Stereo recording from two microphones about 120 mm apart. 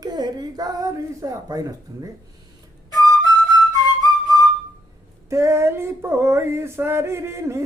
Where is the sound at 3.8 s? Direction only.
35° right (ahead or behind).